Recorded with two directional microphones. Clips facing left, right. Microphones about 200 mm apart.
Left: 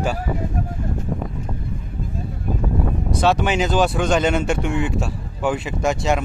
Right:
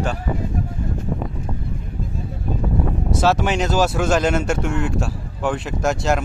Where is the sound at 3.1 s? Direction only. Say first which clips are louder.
Even; centre (ahead or behind).